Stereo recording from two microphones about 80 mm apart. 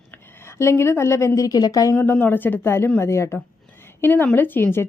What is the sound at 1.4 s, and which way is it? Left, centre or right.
Speech, left.